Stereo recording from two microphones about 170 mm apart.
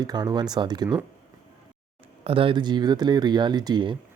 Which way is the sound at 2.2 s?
30° right (ahead or behind).